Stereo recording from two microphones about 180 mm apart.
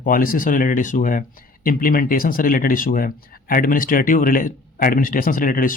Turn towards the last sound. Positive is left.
turn(degrees=50)  # may be behind; listen again after turning